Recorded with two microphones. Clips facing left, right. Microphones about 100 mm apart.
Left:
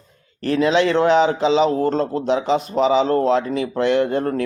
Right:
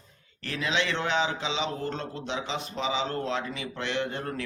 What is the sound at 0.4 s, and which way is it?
A man's voice, 45° left (ahead or behind).